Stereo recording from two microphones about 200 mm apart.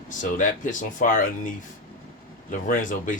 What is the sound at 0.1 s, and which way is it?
Speech, 40° left (ahead or behind).